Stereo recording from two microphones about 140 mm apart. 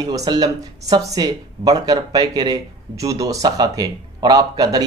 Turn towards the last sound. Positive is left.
turn(degrees=-25)  # may be behind; listen again after turning